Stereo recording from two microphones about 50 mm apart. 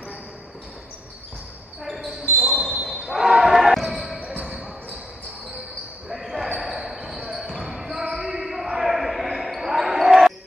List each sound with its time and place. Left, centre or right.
1.8 s basketball bounce: centre
2.4 s a sound: centre
3.1 s basketball bounce: centre
6.0 s basketball bounce: centre